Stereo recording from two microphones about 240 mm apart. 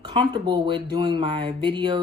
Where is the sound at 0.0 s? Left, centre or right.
Centre.